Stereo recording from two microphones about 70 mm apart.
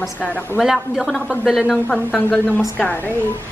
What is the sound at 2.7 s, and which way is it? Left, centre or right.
Speech, left.